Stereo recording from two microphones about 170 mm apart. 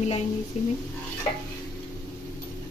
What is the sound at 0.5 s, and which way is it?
Speech, 40° left (ahead or behind).